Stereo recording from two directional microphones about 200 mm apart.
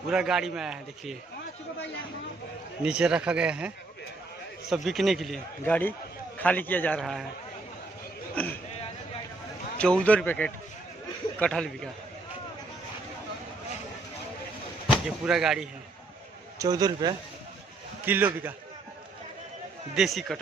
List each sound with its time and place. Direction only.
0.1 s a man's voice: 5° right (ahead or behind)
2.8 s a man's voice: 5° right (ahead or behind)
4.7 s a man's voice: centre (ahead or behind)
8.4 s a man's voice: 5° left (ahead or behind)
9.7 s a man's voice: 5° left (ahead or behind)
14.8 s speech: 5° right (ahead or behind)
16.6 s a man's voice: 20° right (ahead or behind)
18.0 s a man's voice: 10° right (ahead or behind)
20.0 s a man's voice: centre (ahead or behind)